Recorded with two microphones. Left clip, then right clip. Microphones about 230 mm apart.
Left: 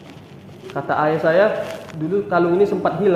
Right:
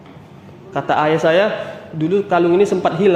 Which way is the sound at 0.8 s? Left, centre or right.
Right.